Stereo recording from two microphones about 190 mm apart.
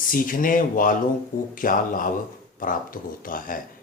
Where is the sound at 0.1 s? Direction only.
45° left (ahead or behind).